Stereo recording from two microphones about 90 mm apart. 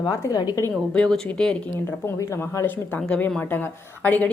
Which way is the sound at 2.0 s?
35° left (ahead or behind).